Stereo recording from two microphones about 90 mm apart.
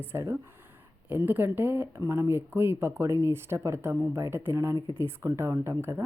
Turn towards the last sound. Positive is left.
turn(degrees=-30)  # may be behind; listen again after turning